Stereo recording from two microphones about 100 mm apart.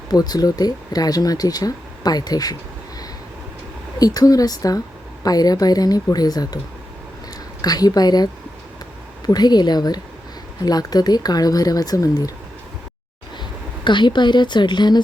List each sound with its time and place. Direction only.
0.1 s speech: 40° left (ahead or behind)
3.9 s speech: 40° left (ahead or behind)
7.6 s speech: 40° left (ahead or behind)
13.8 s speech: 50° left (ahead or behind)